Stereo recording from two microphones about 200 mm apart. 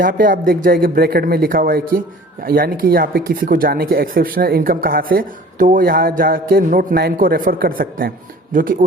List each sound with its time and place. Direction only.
0.0 s speech: 45° right (ahead or behind)